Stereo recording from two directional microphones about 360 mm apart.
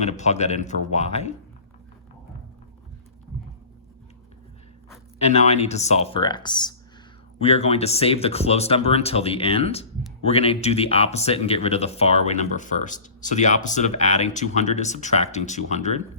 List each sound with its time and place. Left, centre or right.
0.0 s speech: centre
4.9 s speech: centre